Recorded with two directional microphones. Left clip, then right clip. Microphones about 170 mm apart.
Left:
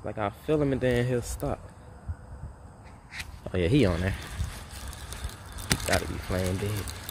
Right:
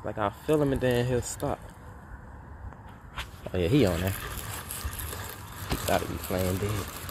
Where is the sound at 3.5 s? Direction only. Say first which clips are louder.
Even; 35° left (ahead or behind).